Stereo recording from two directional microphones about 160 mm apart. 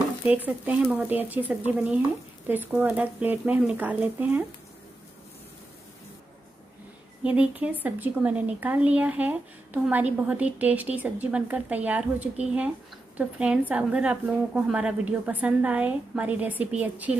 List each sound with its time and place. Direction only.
0.5 s a woman's voice: 10° right (ahead or behind)
7.2 s a woman's voice: 10° right (ahead or behind)